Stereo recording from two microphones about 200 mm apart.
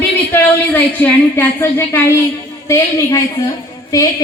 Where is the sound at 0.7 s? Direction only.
10° left (ahead or behind).